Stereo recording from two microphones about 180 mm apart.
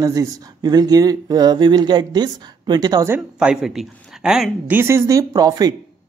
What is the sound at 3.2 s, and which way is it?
Speech, 5° right (ahead or behind).